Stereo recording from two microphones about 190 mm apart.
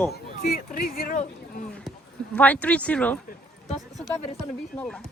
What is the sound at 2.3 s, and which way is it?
Speech, 10° left (ahead or behind).